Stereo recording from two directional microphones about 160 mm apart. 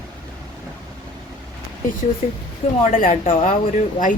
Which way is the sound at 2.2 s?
50° left (ahead or behind).